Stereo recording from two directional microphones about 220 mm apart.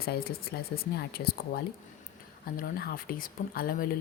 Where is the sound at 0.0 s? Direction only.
45° left (ahead or behind).